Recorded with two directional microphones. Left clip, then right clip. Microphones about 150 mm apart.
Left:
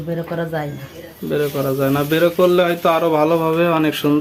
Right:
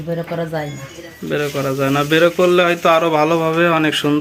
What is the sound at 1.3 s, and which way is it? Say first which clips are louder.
A man's voice: even; centre (ahead or behind).